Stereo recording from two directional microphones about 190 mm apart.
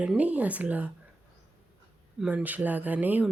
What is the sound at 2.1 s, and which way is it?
Speech, 10° right (ahead or behind).